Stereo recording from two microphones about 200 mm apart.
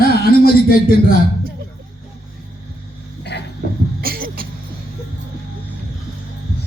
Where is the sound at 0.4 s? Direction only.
50° left (ahead or behind).